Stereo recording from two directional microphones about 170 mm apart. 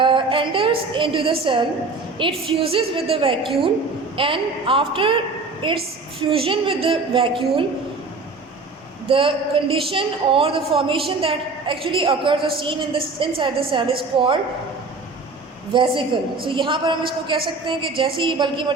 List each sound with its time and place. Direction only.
0.0 s a woman's voice: 30° right (ahead or behind)
9.0 s a woman's voice: 30° right (ahead or behind)
15.7 s a woman's voice: 30° right (ahead or behind)